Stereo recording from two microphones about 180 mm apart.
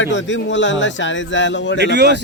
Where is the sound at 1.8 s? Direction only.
70° right (ahead or behind).